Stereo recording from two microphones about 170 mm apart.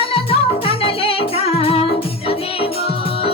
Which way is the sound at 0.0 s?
35° left (ahead or behind).